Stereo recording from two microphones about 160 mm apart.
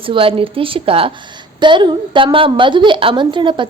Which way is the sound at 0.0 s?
35° right (ahead or behind).